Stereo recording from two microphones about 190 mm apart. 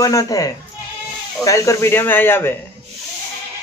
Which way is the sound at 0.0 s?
20° left (ahead or behind).